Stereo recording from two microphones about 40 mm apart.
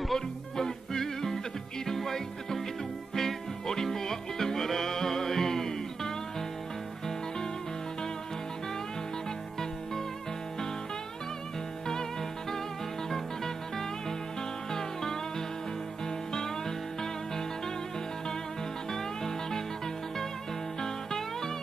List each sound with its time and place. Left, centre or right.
0.1 s music: centre
11.9 s music: centre
18.9 s music: centre
20.8 s music: centre